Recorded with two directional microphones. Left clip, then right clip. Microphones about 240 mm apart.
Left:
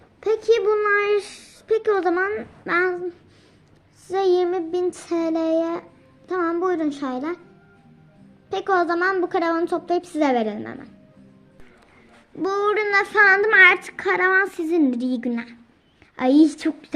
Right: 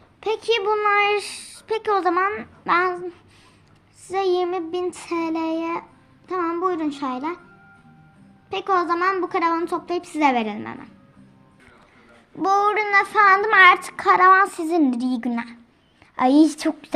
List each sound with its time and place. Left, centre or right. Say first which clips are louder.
0.2 s speech: left 3 dB; centre
4.1 s speech: left 2 dB; centre
8.4 s speech: even; centre
12.4 s speech: right 3 dB; centre
12.7 s speech: right 1 dB; centre